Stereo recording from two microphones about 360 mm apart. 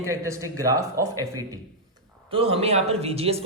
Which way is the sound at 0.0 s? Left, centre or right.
Centre.